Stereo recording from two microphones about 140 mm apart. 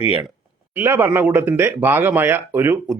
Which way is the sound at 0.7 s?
15° right (ahead or behind).